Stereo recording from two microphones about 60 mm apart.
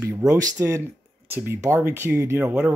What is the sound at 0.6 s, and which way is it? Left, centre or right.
Speech, right.